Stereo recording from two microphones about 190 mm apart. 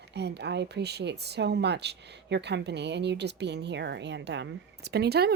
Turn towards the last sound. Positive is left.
turn(degrees=-55)  # may be behind; listen again after turning